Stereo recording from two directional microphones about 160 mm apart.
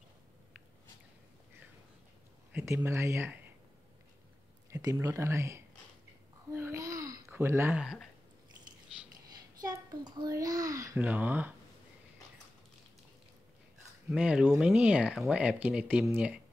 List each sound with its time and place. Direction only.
2.5 s speech: 15° right (ahead or behind)
4.6 s speech: 20° right (ahead or behind)
6.5 s babbling: 20° right (ahead or behind)
7.8 s speech: 5° right (ahead or behind)
9.6 s a child's voice: 25° right (ahead or behind)
11.0 s speech: 10° right (ahead or behind)
14.1 s speech: 5° right (ahead or behind)